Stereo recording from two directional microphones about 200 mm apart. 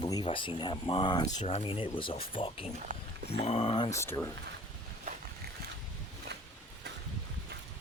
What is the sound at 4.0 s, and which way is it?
Speech, 15° left (ahead or behind).